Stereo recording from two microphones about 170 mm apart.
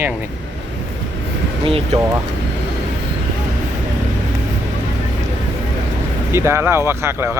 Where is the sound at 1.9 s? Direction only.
40° right (ahead or behind).